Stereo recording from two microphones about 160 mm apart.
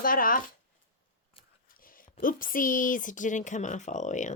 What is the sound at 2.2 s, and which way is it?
Speech, 60° left (ahead or behind).